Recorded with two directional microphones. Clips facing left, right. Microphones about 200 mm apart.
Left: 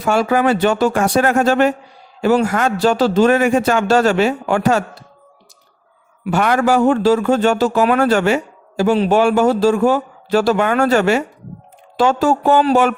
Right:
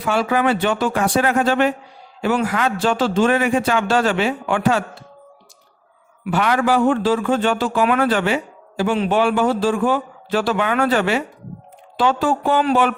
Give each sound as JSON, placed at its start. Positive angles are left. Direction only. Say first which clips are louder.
{"t": 0.0, "sound": "a man's voice", "louder": "left 3 dB", "side_deg": 40}
{"t": 6.2, "sound": "a man's voice", "louder": "left 3 dB", "side_deg": 45}